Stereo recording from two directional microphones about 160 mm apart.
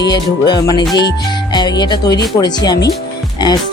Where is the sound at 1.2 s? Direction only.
25° left (ahead or behind).